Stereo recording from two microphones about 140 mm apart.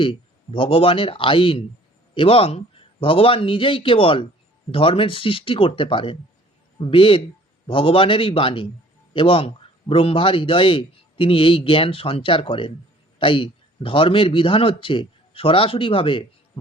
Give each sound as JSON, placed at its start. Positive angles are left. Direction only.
{"t": 0.0, "sound": "a man's voice", "side_deg": 35}